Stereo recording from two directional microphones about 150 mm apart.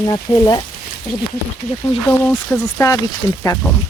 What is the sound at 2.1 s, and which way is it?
Speech, 15° left (ahead or behind).